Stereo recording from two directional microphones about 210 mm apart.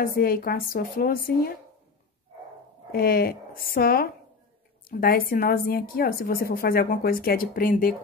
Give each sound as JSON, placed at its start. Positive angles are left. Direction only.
{"t": 0.0, "sound": "a woman's voice", "side_deg": 45}
{"t": 2.9, "sound": "a woman's voice", "side_deg": 45}